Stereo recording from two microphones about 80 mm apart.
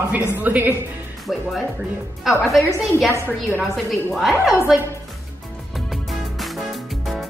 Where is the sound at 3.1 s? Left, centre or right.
Right.